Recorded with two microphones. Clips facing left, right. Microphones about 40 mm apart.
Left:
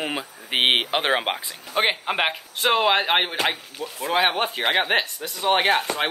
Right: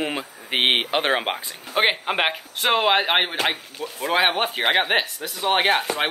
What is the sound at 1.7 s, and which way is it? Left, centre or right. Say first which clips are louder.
Speech: right 1 dB; centre.